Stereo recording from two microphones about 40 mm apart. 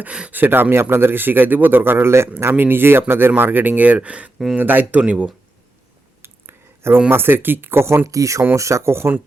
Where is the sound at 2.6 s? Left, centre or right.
Right.